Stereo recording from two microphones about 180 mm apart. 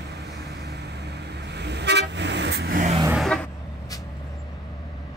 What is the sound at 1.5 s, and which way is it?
Vehicle, 70° right (ahead or behind).